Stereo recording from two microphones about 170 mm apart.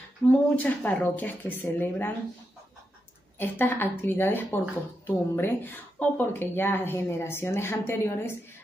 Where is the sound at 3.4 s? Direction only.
10° left (ahead or behind).